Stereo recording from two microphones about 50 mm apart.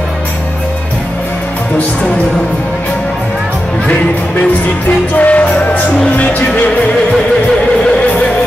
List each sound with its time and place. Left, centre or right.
5.1 s music: left